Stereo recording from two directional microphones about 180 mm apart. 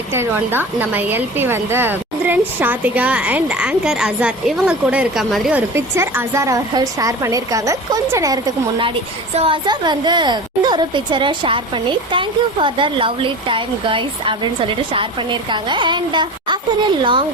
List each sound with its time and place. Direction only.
0.1 s a woman's voice: 10° right (ahead or behind)
9.3 s a woman's voice: 30° right (ahead or behind)